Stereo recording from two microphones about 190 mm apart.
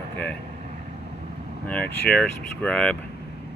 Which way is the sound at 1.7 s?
5° left (ahead or behind).